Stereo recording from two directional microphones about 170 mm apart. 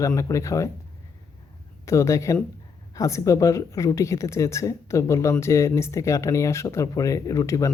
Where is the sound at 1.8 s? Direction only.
20° left (ahead or behind).